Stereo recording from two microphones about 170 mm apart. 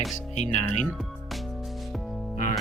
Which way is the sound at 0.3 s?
40° left (ahead or behind).